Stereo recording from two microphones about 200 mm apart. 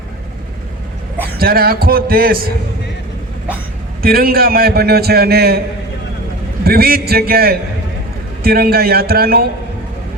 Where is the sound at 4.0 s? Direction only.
50° right (ahead or behind).